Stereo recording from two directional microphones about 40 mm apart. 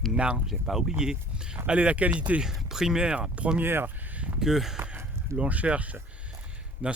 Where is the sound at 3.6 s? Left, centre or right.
Right.